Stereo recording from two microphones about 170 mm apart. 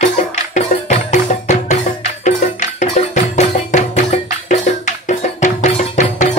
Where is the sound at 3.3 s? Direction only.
40° left (ahead or behind).